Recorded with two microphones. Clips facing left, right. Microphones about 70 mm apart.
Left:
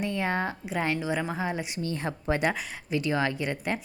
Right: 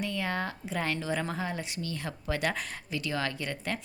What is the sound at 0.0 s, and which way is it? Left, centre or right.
A woman's voice, left.